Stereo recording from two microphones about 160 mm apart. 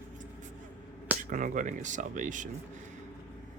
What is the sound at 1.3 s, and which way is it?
Speech, 55° right (ahead or behind).